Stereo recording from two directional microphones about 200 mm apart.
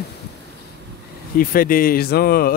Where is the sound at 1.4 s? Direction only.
45° left (ahead or behind).